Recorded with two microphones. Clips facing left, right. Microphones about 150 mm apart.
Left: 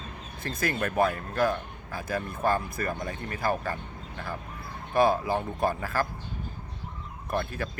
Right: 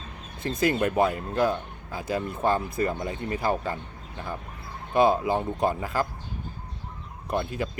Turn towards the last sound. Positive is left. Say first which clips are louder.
# right 2 dB
turn(degrees=-20)  # may be behind; listen again after turning